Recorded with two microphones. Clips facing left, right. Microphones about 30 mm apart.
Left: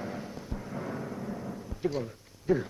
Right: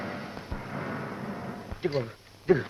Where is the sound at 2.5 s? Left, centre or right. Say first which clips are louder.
Right 4 dB; right.